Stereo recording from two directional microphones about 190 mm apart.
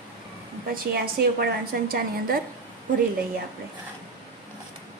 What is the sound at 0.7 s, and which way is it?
A woman's voice, 50° right (ahead or behind).